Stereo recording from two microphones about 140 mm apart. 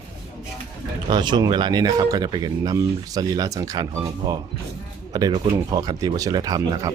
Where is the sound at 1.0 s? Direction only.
30° right (ahead or behind).